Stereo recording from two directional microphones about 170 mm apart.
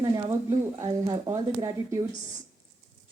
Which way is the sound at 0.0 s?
20° right (ahead or behind).